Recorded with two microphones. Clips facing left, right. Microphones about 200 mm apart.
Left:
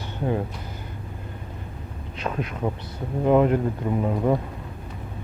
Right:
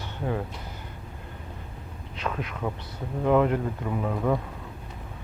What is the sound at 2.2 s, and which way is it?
Speech, 30° left (ahead or behind).